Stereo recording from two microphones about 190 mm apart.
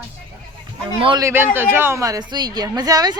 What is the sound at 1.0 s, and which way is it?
Speech, 20° right (ahead or behind).